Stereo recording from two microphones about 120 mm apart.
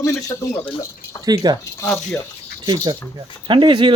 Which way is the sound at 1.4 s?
35° right (ahead or behind).